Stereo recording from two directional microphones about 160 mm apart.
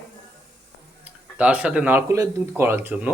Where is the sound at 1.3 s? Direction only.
10° right (ahead or behind).